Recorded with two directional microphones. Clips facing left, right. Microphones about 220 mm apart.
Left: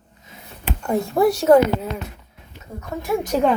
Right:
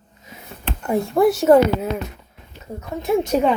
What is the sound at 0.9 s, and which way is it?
Speech, centre (ahead or behind).